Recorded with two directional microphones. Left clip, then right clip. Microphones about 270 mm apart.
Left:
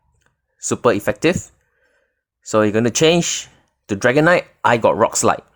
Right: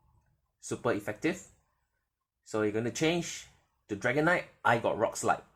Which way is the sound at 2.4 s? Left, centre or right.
Left.